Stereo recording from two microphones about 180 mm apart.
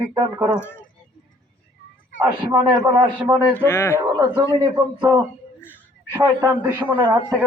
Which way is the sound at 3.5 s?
15° left (ahead or behind).